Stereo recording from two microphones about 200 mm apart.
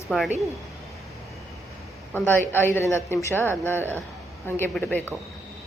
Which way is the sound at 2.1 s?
10° left (ahead or behind).